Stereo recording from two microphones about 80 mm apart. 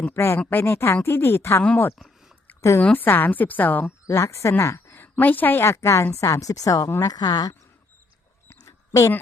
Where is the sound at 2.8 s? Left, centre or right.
Left.